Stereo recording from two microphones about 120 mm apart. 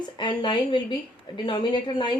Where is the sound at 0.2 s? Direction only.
40° left (ahead or behind).